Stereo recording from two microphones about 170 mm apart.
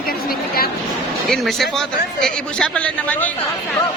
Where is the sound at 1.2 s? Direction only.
Centre (ahead or behind).